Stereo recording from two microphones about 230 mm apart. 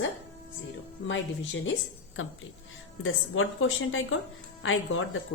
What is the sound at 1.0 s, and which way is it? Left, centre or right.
A woman's voice, left.